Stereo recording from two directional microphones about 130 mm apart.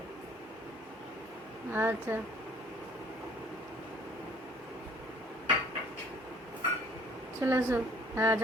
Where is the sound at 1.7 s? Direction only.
15° right (ahead or behind).